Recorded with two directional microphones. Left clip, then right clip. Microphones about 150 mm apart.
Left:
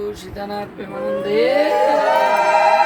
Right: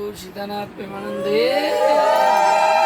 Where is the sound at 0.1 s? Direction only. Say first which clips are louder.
Left 2 dB; 15° right (ahead or behind).